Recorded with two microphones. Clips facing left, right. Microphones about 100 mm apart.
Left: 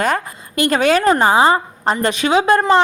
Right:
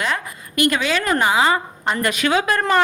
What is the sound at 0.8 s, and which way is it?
Speech, 50° left (ahead or behind).